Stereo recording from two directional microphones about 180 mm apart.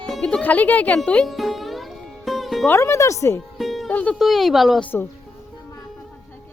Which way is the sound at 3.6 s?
Centre (ahead or behind).